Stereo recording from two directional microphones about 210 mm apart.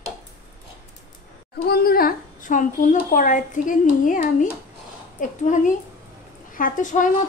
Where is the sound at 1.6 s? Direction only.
45° left (ahead or behind).